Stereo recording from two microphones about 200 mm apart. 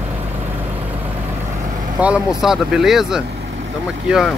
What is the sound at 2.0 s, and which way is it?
Speech, 5° right (ahead or behind).